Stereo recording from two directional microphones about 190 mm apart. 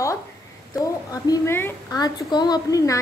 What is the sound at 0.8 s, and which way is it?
A woman's voice, 15° left (ahead or behind).